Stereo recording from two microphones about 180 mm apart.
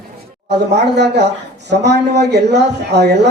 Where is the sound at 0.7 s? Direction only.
70° right (ahead or behind).